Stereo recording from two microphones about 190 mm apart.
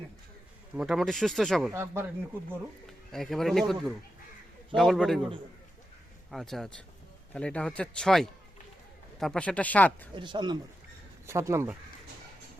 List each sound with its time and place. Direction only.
0.8 s speech: centre (ahead or behind)
1.7 s speech: 15° right (ahead or behind)
2.8 s speech: centre (ahead or behind)
6.3 s speech: centre (ahead or behind)
10.2 s speech: 25° right (ahead or behind)